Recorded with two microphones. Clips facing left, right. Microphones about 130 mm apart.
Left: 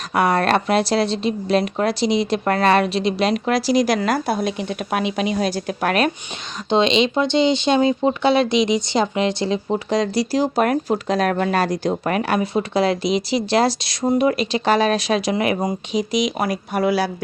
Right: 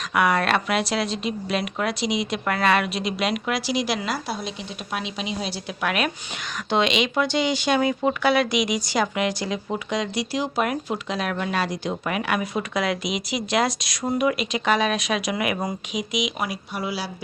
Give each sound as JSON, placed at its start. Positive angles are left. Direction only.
{"t": 0.1, "sound": "speech", "side_deg": 35}
{"t": 6.7, "sound": "speech", "side_deg": 25}
{"t": 16.7, "sound": "speech", "side_deg": 55}